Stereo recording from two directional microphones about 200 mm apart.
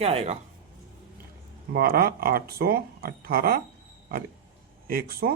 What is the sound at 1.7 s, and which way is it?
Speech, 50° right (ahead or behind).